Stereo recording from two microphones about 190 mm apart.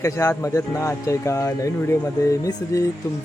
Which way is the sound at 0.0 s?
15° left (ahead or behind).